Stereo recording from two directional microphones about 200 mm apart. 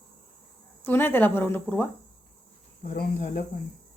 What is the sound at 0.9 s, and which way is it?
Speech, 10° left (ahead or behind).